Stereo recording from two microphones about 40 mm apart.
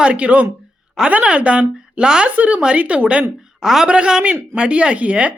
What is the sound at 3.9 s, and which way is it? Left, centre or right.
A man's voice, right.